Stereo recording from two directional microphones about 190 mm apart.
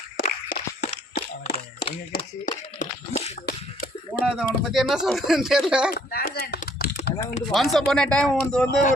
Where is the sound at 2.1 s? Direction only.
45° left (ahead or behind).